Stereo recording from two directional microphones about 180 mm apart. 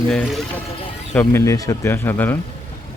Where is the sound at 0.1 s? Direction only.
5° left (ahead or behind).